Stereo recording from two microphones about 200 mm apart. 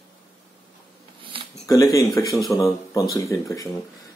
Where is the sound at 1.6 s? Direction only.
15° left (ahead or behind).